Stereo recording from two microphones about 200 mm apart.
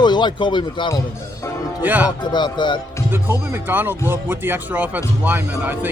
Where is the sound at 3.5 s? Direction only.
10° right (ahead or behind).